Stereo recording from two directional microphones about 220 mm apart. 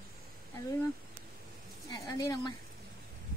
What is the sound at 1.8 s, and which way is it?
Speech, 15° left (ahead or behind).